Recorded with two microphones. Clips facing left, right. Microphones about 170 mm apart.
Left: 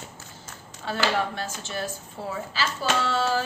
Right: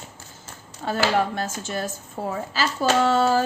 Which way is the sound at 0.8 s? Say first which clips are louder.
Right 4 dB; 45° right (ahead or behind).